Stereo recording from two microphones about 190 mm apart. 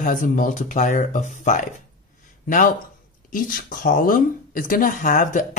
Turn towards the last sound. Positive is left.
turn(degrees=45)  # may be behind; listen again after turning